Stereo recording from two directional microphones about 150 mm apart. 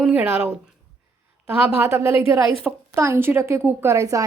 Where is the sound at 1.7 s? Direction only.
15° right (ahead or behind).